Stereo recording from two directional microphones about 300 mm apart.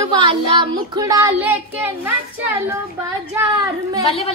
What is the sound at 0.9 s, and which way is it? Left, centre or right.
Speech, centre.